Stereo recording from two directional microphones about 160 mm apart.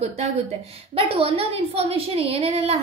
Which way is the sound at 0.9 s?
35° right (ahead or behind).